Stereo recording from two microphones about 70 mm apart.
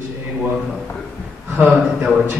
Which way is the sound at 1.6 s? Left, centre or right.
Right.